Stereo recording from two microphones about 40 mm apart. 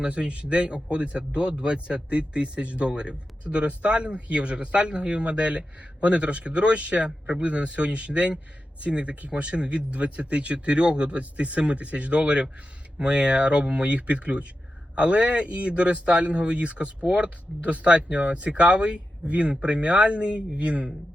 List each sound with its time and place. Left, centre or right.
0.0 s speech: right